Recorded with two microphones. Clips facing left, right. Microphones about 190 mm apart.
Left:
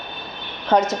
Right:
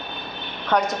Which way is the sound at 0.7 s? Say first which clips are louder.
Left 4 dB; 25° left (ahead or behind).